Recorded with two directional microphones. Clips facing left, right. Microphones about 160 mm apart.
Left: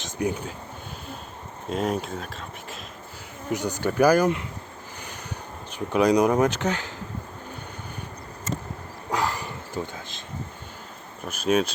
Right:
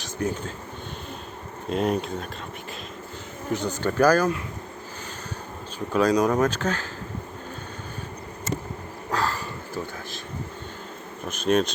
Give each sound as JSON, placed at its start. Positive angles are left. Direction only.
{"t": 0.0, "sound": "speech", "side_deg": 15}
{"t": 1.7, "sound": "speech", "side_deg": 0}
{"t": 3.5, "sound": "speech", "side_deg": 10}
{"t": 5.9, "sound": "speech", "side_deg": 15}
{"t": 9.1, "sound": "dog", "side_deg": 15}
{"t": 11.3, "sound": "speech", "side_deg": 5}